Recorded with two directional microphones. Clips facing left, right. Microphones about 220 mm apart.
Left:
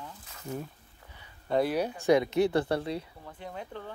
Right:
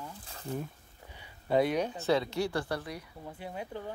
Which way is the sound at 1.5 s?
5° left (ahead or behind).